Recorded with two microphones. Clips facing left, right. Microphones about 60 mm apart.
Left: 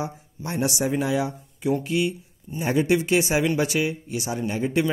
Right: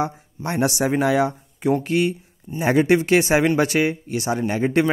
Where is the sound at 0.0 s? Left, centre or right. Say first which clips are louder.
Right 6 dB; right.